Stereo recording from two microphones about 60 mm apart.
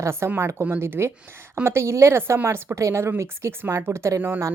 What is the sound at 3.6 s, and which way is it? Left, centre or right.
Speech, right.